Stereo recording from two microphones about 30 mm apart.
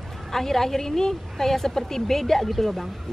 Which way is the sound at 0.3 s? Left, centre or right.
Centre.